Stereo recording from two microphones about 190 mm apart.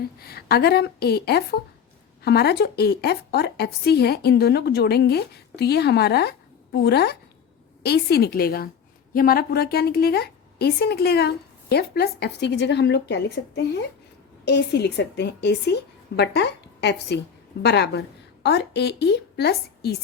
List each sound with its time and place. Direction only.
0.2 s a woman's voice: 55° left (ahead or behind)